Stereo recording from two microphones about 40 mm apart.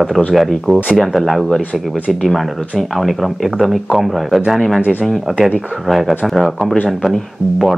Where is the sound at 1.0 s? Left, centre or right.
Centre.